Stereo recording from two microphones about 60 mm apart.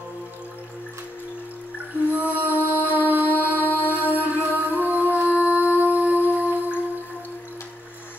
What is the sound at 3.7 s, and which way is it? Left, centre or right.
Music, right.